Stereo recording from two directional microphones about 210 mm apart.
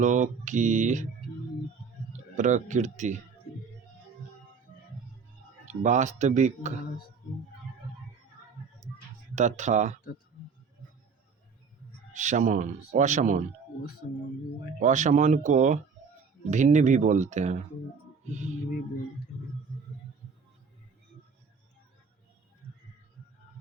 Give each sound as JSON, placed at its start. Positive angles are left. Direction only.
{"t": 0.0, "sound": "speech", "side_deg": -35}
{"t": 2.3, "sound": "speech", "side_deg": -35}
{"t": 5.6, "sound": "speech", "side_deg": -35}
{"t": 9.3, "sound": "speech", "side_deg": -35}
{"t": 12.1, "sound": "speech", "side_deg": -35}
{"t": 14.8, "sound": "speech", "side_deg": -35}